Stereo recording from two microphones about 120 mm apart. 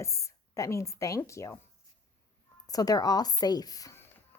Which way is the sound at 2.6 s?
30° left (ahead or behind).